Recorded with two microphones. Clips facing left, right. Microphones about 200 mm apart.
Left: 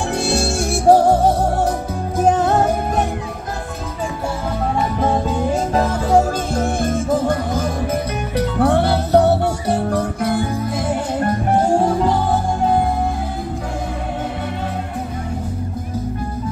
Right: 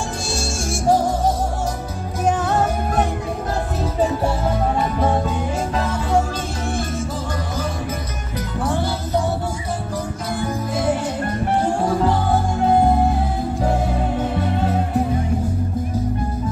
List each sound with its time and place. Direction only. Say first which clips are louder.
0.3 s music: left 6 dB; 65° left (ahead or behind)
5.8 s music: left 5 dB; 40° left (ahead or behind)
8.5 s music: left 6 dB; 65° left (ahead or behind)